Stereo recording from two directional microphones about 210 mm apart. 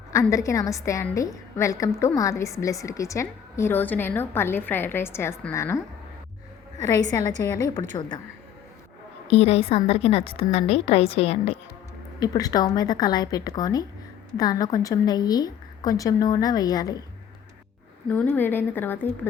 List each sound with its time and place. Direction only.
0.1 s a woman's voice: 15° left (ahead or behind)
9.3 s a woman's voice: 30° left (ahead or behind)
12.2 s a woman's voice: 20° left (ahead or behind)
18.1 s a woman's voice: 10° left (ahead or behind)